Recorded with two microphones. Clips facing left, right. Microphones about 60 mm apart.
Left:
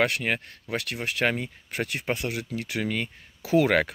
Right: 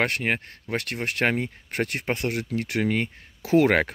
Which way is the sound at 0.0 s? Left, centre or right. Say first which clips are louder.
Even; right.